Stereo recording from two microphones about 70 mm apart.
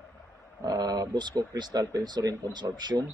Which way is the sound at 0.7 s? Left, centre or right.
Right.